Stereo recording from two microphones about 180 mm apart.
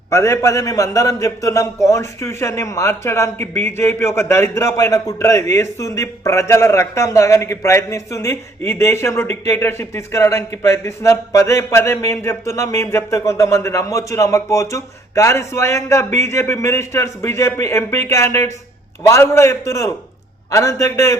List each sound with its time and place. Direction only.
0.1 s a man's voice: 15° left (ahead or behind)